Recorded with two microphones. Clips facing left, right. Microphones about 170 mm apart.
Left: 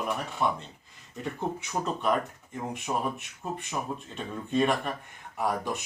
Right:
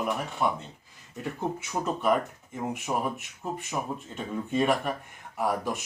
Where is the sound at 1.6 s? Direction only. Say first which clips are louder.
Right 1 dB; 5° right (ahead or behind).